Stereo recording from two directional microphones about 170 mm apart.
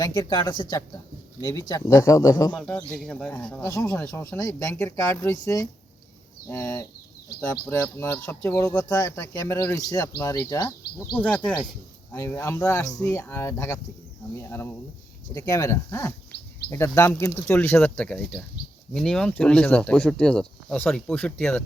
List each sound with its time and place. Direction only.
0.0 s speech: 20° left (ahead or behind)
2.6 s speech: 5° left (ahead or behind)
11.2 s speech: 5° left (ahead or behind)
16.3 s a sound: 75° left (ahead or behind)
16.6 s speech: 15° left (ahead or behind)